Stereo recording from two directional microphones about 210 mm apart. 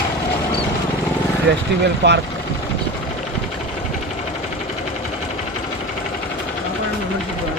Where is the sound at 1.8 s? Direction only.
55° right (ahead or behind).